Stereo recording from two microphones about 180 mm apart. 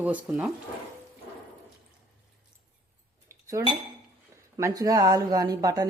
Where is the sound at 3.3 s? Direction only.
15° right (ahead or behind).